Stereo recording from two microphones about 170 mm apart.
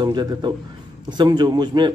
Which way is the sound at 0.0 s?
25° right (ahead or behind).